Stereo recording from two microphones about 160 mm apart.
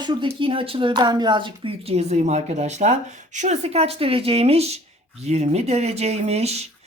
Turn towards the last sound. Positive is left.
turn(degrees=-40)  # may be behind; listen again after turning